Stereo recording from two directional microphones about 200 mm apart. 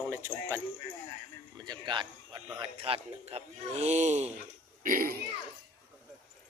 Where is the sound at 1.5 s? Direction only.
20° right (ahead or behind); by 5.1 s 45° right (ahead or behind).